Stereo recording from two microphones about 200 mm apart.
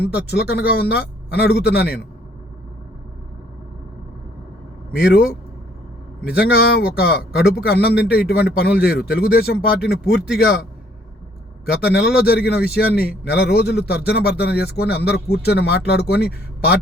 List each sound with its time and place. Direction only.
0.0 s a man's voice: 55° left (ahead or behind)
4.9 s a man's voice: 50° left (ahead or behind)
6.4 s a man's voice: 50° left (ahead or behind)
11.6 s a man's voice: 50° left (ahead or behind)